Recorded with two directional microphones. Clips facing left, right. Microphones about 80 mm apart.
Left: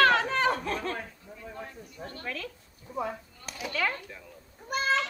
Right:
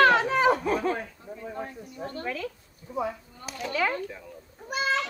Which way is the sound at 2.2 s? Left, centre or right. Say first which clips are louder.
Right 4 dB; centre.